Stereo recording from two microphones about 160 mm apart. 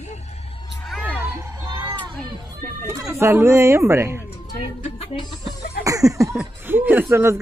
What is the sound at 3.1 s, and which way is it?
A woman's voice, 15° right (ahead or behind).